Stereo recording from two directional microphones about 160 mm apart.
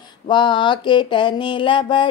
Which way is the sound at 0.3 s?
30° left (ahead or behind).